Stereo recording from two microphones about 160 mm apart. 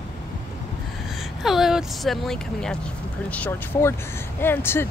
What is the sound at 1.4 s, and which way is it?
Speech, centre (ahead or behind).